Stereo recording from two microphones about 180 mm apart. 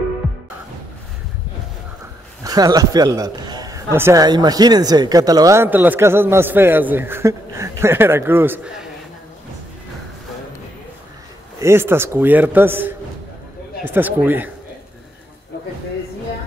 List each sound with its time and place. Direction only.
0.2 s music: centre (ahead or behind)
2.4 s a man's voice: 20° right (ahead or behind)
11.6 s a man's voice: 15° right (ahead or behind)